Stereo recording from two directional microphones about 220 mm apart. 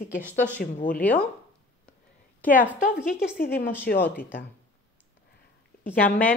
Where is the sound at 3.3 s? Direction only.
40° left (ahead or behind).